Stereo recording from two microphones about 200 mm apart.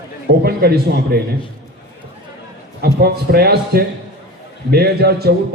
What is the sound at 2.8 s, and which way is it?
A man's voice, 50° right (ahead or behind).